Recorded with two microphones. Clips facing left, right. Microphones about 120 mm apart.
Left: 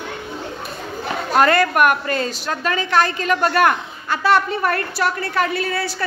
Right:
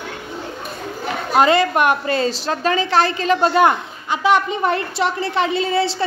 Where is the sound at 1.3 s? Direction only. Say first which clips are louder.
Right 1 dB; 20° right (ahead or behind).